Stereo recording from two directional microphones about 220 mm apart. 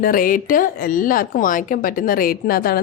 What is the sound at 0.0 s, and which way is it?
Speech, 40° left (ahead or behind).